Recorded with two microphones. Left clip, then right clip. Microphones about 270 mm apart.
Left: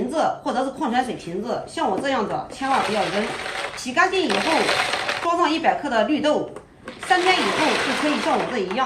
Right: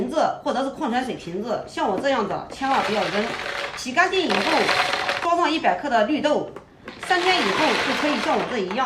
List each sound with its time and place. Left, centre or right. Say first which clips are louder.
0.2 s speech: even; centre
2.0 s speech: right 1 dB; centre